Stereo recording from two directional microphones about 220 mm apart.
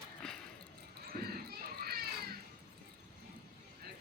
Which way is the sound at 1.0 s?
45° right (ahead or behind).